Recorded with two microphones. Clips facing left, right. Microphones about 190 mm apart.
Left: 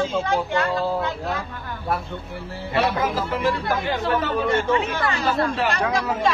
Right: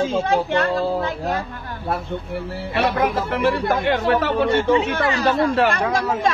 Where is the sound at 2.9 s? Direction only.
65° right (ahead or behind).